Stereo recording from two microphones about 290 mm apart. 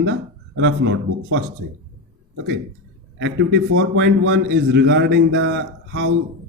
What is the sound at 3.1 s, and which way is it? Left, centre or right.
A man's voice, right.